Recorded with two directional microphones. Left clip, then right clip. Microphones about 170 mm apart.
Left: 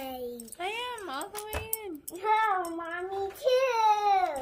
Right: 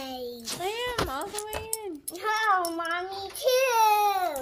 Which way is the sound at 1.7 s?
15° right (ahead or behind).